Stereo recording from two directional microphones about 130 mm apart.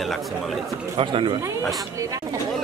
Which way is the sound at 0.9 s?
40° right (ahead or behind).